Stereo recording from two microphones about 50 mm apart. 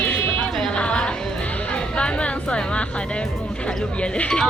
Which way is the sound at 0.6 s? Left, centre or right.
Centre.